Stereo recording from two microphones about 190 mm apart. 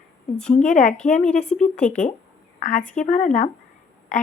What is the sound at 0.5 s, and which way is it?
A woman's voice, 40° left (ahead or behind).